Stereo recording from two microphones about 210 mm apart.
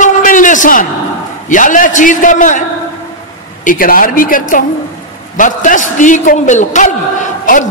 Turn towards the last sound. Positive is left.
turn(degrees=35)  # may be behind; listen again after turning